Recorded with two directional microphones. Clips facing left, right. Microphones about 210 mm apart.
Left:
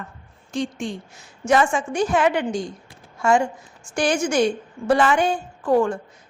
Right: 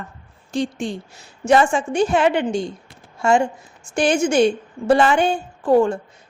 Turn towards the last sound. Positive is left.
turn(degrees=-25)  # may be behind; listen again after turning